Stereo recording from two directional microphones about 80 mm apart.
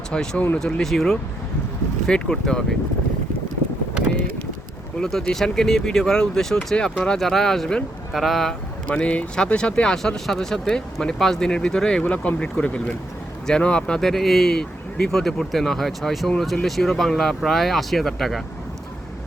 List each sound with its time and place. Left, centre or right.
0.1 s speech: centre
4.9 s speech: centre
8.9 s speech: centre